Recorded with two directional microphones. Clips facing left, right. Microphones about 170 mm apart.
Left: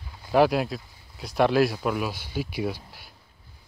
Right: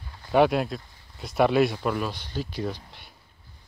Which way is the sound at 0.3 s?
Centre (ahead or behind).